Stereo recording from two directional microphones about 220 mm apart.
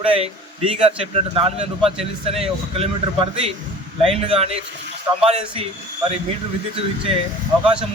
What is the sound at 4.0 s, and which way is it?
A man's voice, 25° right (ahead or behind).